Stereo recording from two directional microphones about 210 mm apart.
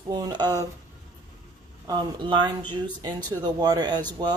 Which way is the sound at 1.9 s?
20° right (ahead or behind).